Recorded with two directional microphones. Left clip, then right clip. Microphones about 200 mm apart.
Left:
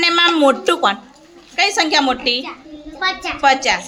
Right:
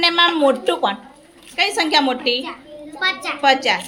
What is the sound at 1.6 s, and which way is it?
A woman's voice, 5° left (ahead or behind).